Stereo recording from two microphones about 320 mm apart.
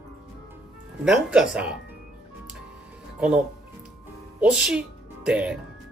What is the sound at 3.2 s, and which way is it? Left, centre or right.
Speech, centre.